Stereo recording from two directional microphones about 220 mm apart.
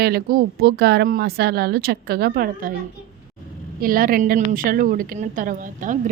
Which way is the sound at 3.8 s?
40° right (ahead or behind).